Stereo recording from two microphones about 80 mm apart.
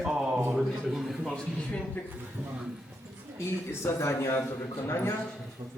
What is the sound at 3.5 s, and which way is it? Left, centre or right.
A man's voice, left.